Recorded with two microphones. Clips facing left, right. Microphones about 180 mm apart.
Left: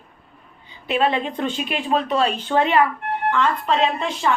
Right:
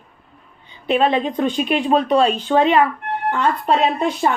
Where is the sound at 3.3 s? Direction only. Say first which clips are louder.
Right 3 dB; 45° right (ahead or behind).